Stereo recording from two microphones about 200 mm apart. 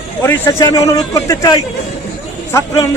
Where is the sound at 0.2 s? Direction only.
15° left (ahead or behind).